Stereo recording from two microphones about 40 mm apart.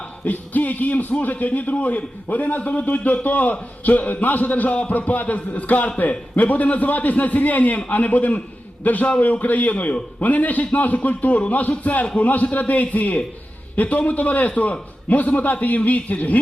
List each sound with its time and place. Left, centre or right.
0.3 s a man's voice: left